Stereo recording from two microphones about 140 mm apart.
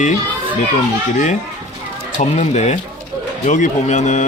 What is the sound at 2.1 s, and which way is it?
Speech, 55° left (ahead or behind).